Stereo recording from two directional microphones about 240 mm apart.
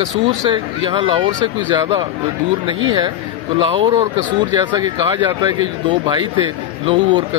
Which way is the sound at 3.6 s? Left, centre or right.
Right.